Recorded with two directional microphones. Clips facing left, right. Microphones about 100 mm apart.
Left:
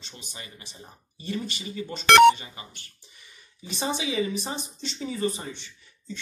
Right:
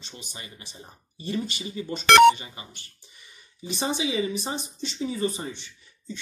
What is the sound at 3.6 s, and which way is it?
Speech, 25° right (ahead or behind).